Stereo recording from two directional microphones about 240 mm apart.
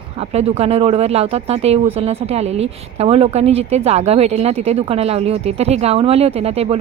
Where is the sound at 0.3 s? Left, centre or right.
Right.